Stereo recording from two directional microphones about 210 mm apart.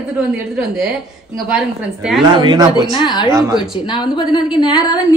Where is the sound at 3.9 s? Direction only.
20° left (ahead or behind).